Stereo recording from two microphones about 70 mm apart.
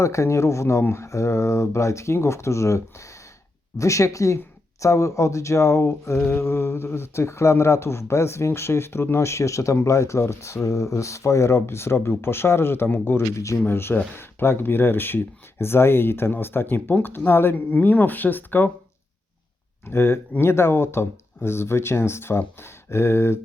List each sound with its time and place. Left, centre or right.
0.0 s speech: left
13.3 s speech: left
13.7 s speech: left
19.9 s speech: left